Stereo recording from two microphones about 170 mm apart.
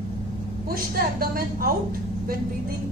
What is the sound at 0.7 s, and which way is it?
A woman's voice, 60° right (ahead or behind).